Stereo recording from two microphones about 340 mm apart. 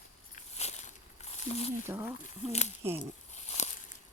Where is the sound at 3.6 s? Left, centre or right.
Centre.